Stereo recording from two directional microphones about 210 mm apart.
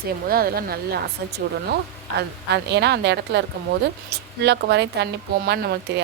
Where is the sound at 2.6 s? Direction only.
55° right (ahead or behind).